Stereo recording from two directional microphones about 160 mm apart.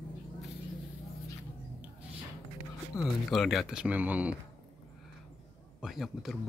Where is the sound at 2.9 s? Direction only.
20° left (ahead or behind).